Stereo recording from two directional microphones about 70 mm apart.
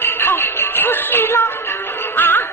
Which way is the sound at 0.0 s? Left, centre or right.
Left.